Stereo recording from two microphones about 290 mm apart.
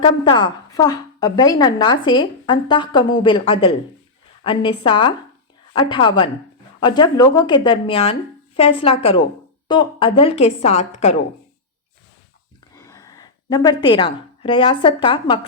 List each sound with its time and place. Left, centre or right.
0.0 s a woman's voice: centre
12.7 s a woman's voice: centre